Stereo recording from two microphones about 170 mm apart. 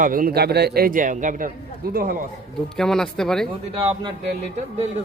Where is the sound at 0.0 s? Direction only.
55° right (ahead or behind).